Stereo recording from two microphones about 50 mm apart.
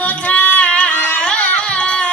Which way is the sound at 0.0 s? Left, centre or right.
Left.